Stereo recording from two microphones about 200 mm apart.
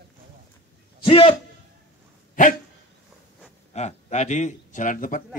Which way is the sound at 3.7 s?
35° left (ahead or behind).